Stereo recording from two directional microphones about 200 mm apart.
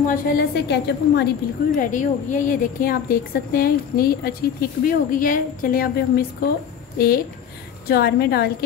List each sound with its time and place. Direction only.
0.0 s a woman's voice: 45° left (ahead or behind)
1.8 s a woman's voice: 40° left (ahead or behind)
7.9 s a woman's voice: 50° left (ahead or behind)